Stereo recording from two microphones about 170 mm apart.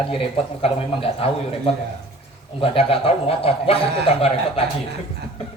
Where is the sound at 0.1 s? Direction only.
35° left (ahead or behind).